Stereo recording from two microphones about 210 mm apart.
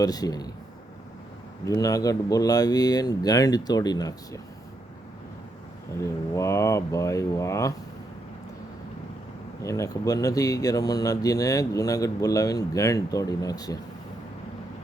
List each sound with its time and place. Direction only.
0.0 s speech: 15° left (ahead or behind)
1.6 s speech: 15° left (ahead or behind)
6.0 s speech: 15° left (ahead or behind)
9.6 s speech: 15° left (ahead or behind)